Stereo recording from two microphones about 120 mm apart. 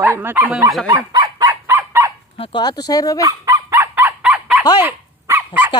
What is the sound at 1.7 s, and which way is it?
Fowl, 20° right (ahead or behind).